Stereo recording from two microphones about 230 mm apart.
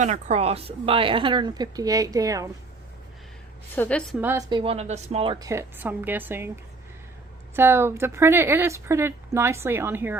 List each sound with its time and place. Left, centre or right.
0.0 s a woman's voice: right; by 2.5 s centre
3.8 s a woman's voice: centre
4.2 s speech: centre
7.5 s speech: centre